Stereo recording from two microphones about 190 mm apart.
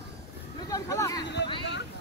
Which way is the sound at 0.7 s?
15° left (ahead or behind).